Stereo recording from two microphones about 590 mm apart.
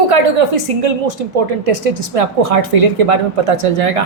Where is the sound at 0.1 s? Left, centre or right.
Right.